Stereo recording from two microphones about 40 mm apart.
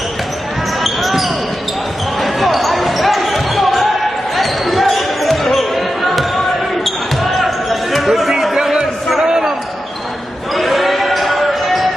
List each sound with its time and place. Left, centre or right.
0.8 s basketball bounce: centre
9.2 s a sound: centre
10.5 s basketball bounce: centre